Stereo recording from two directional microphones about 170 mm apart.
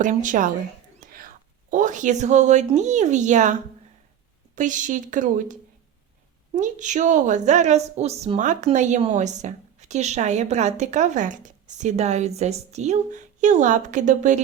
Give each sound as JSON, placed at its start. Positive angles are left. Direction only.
{"t": 0.0, "sound": "a woman's voice", "side_deg": -50}
{"t": 0.9, "sound": "whispering", "side_deg": -55}
{"t": 1.7, "sound": "a woman's voice", "side_deg": -50}